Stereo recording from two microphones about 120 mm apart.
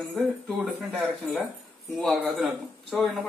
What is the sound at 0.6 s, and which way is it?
Speech, centre (ahead or behind).